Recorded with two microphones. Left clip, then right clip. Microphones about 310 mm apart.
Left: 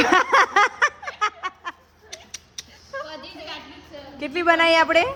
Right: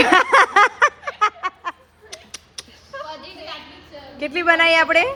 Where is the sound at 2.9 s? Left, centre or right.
Left.